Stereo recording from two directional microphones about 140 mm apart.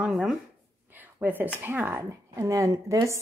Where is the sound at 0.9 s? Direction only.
15° right (ahead or behind).